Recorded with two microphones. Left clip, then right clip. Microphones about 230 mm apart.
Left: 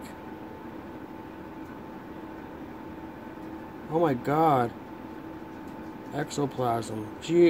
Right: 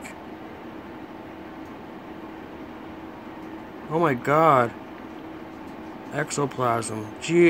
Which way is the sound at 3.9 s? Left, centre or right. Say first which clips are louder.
Right 4 dB; centre.